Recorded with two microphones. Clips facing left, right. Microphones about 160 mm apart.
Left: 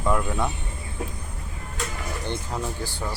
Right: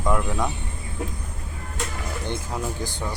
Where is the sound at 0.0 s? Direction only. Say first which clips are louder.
Even; 5° left (ahead or behind).